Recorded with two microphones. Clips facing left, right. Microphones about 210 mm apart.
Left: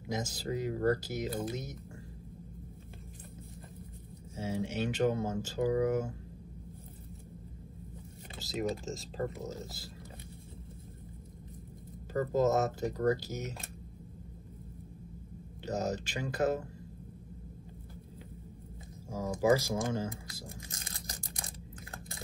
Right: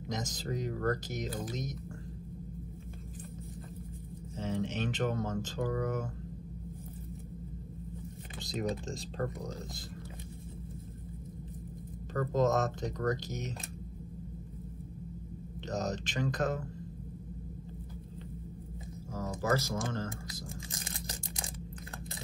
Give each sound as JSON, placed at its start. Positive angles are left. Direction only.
{"t": 0.1, "sound": "speech", "side_deg": 10}
{"t": 4.4, "sound": "speech", "side_deg": 10}
{"t": 8.4, "sound": "speech", "side_deg": 0}
{"t": 12.1, "sound": "speech", "side_deg": 10}
{"t": 15.6, "sound": "speech", "side_deg": 10}
{"t": 19.1, "sound": "speech", "side_deg": 10}
{"t": 20.8, "sound": "a sound", "side_deg": -25}